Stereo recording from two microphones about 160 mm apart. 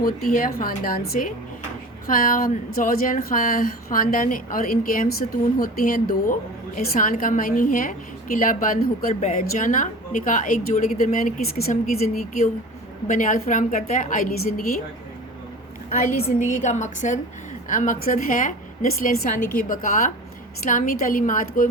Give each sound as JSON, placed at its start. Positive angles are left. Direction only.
{"t": 0.3, "sound": "a woman's voice", "side_deg": 60}
{"t": 13.1, "sound": "a woman's voice", "side_deg": 55}
{"t": 15.9, "sound": "a woman's voice", "side_deg": 65}